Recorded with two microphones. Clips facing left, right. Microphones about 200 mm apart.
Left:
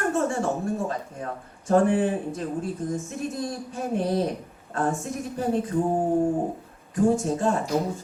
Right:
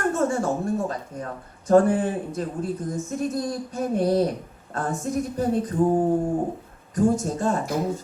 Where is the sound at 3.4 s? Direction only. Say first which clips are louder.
Right 3 dB; 40° right (ahead or behind).